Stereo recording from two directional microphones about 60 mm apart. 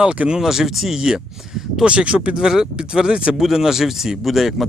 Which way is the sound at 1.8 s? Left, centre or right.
Centre.